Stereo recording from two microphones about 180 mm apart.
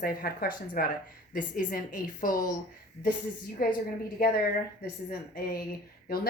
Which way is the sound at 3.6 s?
55° left (ahead or behind).